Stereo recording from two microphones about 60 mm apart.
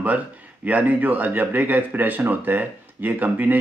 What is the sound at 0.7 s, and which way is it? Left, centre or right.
Speech, right.